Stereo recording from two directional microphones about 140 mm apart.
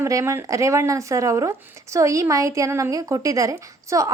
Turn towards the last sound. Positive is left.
turn(degrees=-20)  # may be behind; listen again after turning